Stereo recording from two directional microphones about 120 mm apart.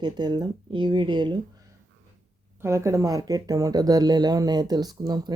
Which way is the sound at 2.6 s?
25° right (ahead or behind).